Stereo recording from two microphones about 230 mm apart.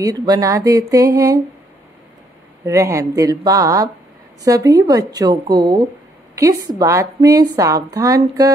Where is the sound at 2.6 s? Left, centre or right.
Centre.